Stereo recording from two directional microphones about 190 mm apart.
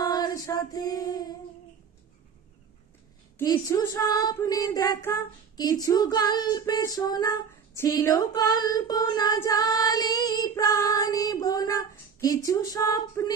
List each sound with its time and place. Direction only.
0.0 s female singing: 20° left (ahead or behind)
3.3 s child singing: 20° left (ahead or behind)